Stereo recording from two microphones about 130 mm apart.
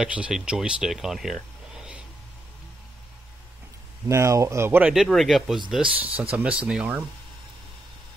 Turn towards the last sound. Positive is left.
turn(degrees=-10)  # may be behind; listen again after turning